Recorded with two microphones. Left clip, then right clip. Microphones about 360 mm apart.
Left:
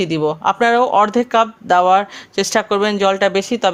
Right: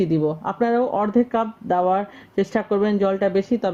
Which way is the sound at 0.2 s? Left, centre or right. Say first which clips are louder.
Left 7 dB; left.